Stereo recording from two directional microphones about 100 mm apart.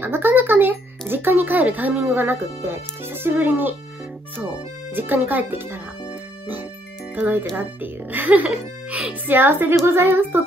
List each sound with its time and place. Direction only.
0.0 s speech: 20° right (ahead or behind)
4.9 s speech: 20° right (ahead or behind)
7.2 s speech: 20° right (ahead or behind)